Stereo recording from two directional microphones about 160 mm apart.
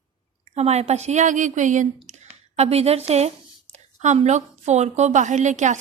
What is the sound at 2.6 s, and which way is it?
A woman's voice, 40° right (ahead or behind).